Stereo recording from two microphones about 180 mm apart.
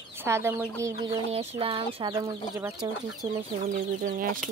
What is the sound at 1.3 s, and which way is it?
Speech, 30° right (ahead or behind).